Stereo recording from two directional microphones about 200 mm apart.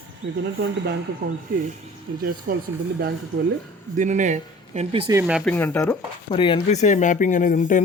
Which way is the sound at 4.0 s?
40° right (ahead or behind).